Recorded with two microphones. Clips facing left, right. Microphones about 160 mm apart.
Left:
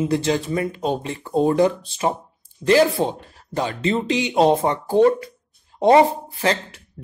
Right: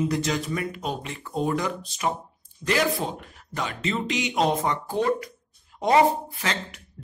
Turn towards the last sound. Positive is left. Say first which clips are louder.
# left 8 dB
turn(degrees=30)  # may be behind; listen again after turning